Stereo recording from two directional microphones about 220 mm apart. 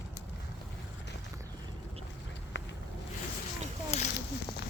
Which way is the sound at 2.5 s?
55° left (ahead or behind).